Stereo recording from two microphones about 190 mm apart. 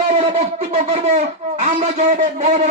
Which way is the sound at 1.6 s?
40° right (ahead or behind).